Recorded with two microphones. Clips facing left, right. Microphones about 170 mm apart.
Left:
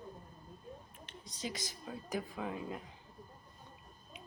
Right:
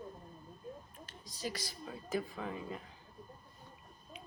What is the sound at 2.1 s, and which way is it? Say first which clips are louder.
Speech: right 1 dB; 10° left (ahead or behind).